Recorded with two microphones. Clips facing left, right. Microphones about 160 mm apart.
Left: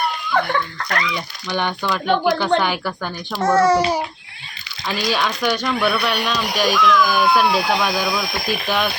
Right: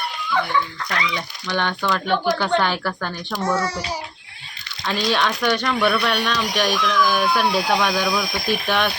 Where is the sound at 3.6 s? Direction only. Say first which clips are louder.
Left 10 dB; 60° left (ahead or behind).